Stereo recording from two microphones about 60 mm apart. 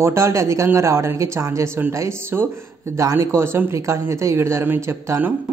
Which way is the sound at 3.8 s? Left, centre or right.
Right.